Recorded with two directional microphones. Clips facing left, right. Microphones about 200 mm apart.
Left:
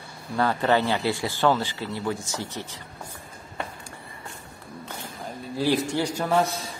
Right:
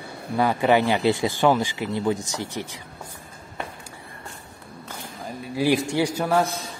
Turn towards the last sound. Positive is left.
turn(degrees=-5)  # may be behind; listen again after turning